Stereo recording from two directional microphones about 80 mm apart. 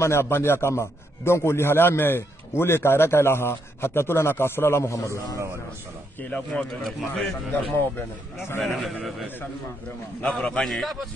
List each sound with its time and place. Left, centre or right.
0.0 s a man's voice: left
6.3 s speech: centre
6.7 s a man's voice: centre
8.6 s a man's voice: centre
10.2 s a man's voice: centre